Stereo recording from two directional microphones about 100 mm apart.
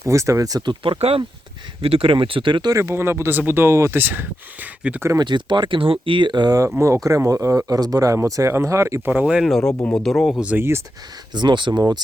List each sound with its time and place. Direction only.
0.0 s speech: 30° right (ahead or behind); by 1.2 s 80° right
1.8 s speech: 65° right (ahead or behind)
2.7 s speech: 25° right (ahead or behind)
5.2 s speech: 50° right (ahead or behind)
6.7 s speech: 30° right (ahead or behind); by 9.5 s 15° right (ahead or behind)
9.5 s speech: 5° left (ahead or behind)
10.4 s speech: 15° right (ahead or behind)
11.3 s speech: 50° right (ahead or behind)